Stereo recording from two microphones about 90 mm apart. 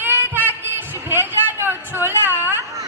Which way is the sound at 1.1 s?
25° right (ahead or behind).